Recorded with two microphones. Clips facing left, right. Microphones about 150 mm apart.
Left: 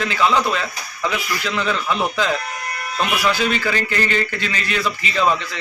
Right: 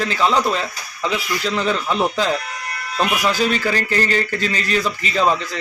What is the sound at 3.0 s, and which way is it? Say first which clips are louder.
Speech: right 1 dB; 35° right (ahead or behind).